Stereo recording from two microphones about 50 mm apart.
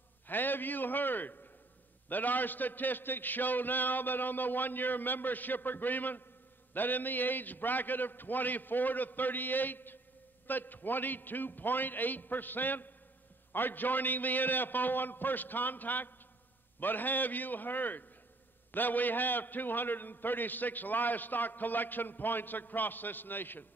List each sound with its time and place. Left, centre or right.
0.3 s a man's voice: left